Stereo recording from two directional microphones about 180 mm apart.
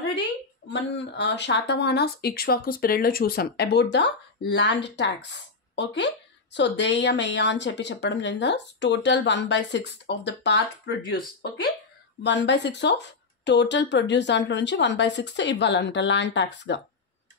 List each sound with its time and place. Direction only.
0.7 s speech: 75° left (ahead or behind)
12.2 s speech: 75° left (ahead or behind)